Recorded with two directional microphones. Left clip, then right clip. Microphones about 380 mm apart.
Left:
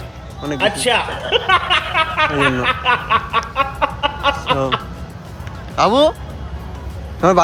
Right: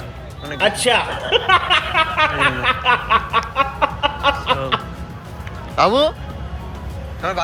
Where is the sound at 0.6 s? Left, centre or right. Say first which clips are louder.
Even; centre.